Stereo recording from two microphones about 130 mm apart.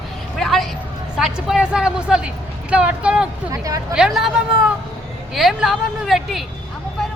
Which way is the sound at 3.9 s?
5° right (ahead or behind).